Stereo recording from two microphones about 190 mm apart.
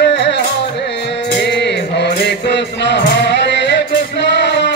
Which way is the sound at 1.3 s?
65° left (ahead or behind).